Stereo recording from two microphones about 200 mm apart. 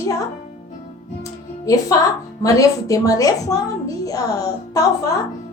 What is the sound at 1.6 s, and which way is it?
A child's voice, 15° left (ahead or behind).